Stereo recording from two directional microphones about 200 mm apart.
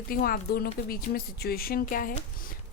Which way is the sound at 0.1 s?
50° left (ahead or behind).